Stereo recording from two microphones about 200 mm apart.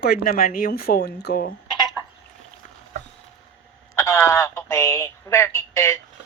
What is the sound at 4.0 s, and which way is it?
Speech, 15° left (ahead or behind).